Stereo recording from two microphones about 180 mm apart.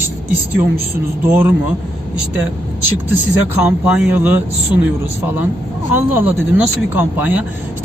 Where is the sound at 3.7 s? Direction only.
10° right (ahead or behind).